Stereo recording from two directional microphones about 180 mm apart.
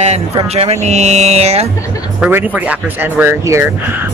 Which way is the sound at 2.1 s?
10° right (ahead or behind).